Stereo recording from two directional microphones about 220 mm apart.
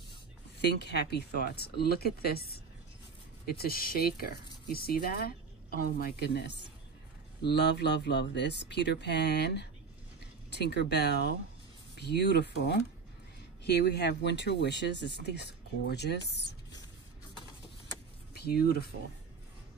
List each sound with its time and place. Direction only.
0.6 s speech: 50° left (ahead or behind)
18.3 s speech: 45° left (ahead or behind)